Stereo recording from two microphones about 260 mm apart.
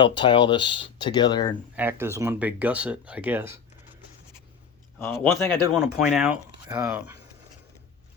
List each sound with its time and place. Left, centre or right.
0.0 s speech: centre
1.7 s speech: centre
5.1 s speech: centre